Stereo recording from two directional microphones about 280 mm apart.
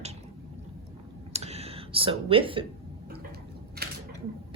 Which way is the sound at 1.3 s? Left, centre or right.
Right.